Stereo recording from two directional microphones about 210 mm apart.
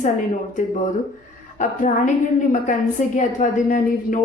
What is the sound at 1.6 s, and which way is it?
Speech, 35° left (ahead or behind).